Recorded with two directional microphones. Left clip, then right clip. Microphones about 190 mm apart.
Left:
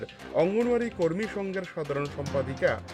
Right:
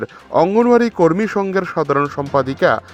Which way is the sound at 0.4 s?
35° right (ahead or behind).